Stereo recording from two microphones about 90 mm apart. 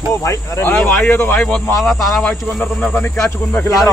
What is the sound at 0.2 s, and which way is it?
Speech, 30° left (ahead or behind).